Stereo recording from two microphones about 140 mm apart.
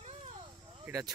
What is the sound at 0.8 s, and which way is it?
Speech, 25° right (ahead or behind).